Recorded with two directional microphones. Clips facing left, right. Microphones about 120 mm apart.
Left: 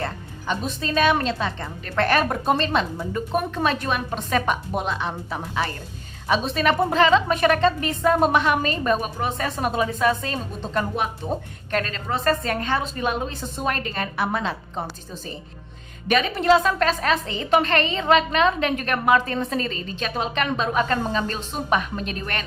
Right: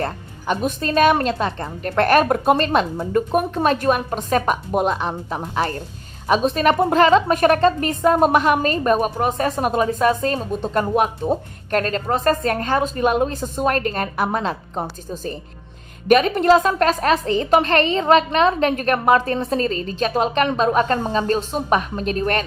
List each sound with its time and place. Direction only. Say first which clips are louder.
0.0 s a woman's voice: right 4 dB; 50° right (ahead or behind)